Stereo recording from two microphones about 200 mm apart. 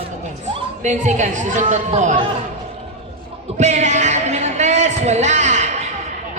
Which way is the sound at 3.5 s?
35° right (ahead or behind).